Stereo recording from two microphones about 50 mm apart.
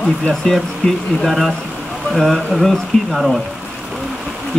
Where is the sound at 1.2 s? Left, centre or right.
Centre.